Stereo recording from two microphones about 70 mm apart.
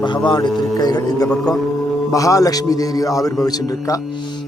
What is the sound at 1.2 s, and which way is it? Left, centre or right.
Speech, centre.